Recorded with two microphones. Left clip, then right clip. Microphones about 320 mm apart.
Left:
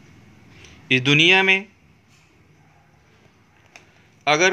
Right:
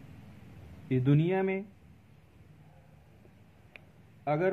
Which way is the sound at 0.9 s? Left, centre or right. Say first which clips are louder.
Left 15 dB; centre.